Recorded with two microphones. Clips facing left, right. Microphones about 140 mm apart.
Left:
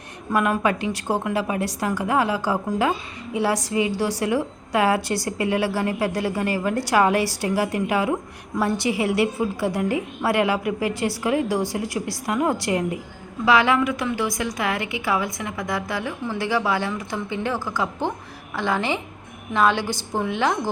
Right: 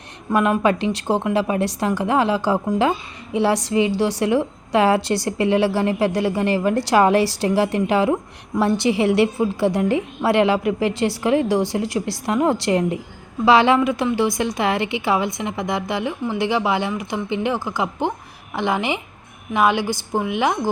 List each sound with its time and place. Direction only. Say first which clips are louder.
0.3 s a woman's voice: right 3 dB; 20° right (ahead or behind)